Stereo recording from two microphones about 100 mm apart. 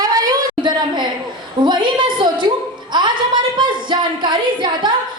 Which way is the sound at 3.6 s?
50° right (ahead or behind).